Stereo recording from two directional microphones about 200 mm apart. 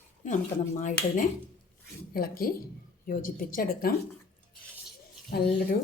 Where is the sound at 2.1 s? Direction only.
45° left (ahead or behind).